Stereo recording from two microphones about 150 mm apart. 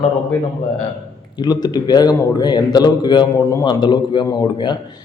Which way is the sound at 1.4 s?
25° left (ahead or behind).